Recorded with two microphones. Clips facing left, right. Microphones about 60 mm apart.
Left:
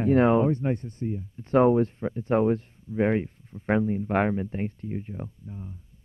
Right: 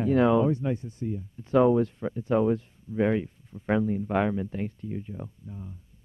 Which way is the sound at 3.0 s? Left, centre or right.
Left.